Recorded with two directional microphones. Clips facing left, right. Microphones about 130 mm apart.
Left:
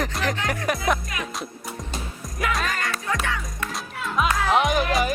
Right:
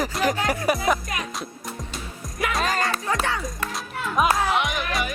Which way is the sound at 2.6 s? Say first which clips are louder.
Right 3 dB; 30° right (ahead or behind).